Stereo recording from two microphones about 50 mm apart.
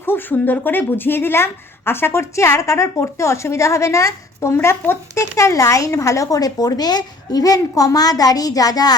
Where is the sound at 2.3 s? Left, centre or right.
Left.